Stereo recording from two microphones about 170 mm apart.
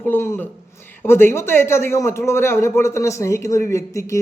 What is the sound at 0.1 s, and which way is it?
A man's voice, 15° left (ahead or behind).